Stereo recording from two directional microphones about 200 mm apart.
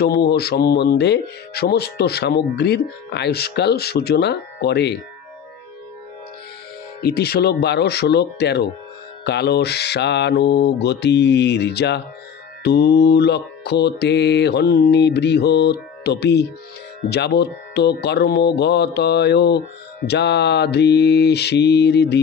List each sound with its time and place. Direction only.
0.0 s speech: 55° left (ahead or behind)
7.0 s speech: 50° left (ahead or behind)